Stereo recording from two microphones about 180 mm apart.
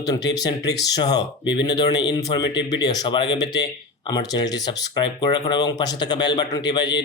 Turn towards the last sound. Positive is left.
turn(degrees=25)  # may be behind; listen again after turning